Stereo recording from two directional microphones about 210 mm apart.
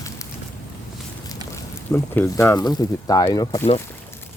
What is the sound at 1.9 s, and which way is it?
Speech, 10° left (ahead or behind).